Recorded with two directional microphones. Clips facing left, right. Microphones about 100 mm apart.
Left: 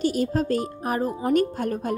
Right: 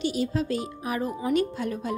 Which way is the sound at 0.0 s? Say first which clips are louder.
Left 4 dB; 45° left (ahead or behind).